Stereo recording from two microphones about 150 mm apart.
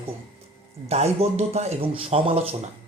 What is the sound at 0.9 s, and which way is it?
Speech, 45° right (ahead or behind).